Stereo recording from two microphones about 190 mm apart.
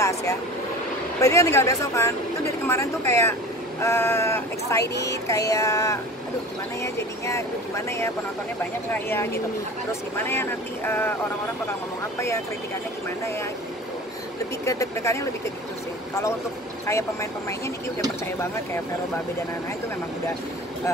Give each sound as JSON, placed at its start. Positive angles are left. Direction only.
{"t": 0.0, "sound": "vehicle", "side_deg": 15}
{"t": 1.2, "sound": "speech", "side_deg": 15}
{"t": 14.6, "sound": "speech", "side_deg": 15}
{"t": 16.8, "sound": "speech", "side_deg": 15}